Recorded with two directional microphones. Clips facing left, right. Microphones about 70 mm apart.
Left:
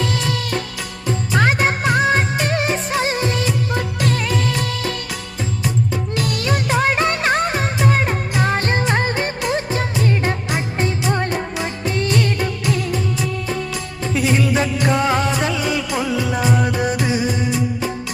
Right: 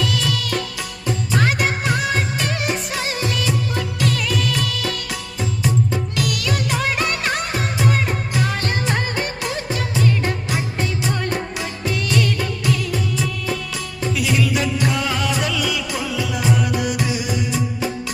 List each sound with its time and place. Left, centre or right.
0.1 s music of bollywood: left
6.2 s music: left
10.8 s music of bollywood: left
14.1 s music: left